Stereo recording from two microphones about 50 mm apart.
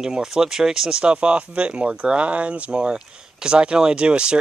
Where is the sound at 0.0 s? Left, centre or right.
Centre.